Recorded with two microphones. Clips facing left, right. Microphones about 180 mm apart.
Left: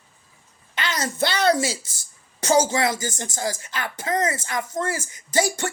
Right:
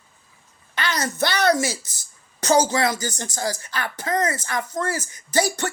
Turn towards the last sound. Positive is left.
turn(degrees=20)  # may be behind; listen again after turning